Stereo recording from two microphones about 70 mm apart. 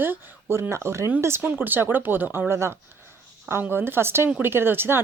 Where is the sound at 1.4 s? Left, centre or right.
Right.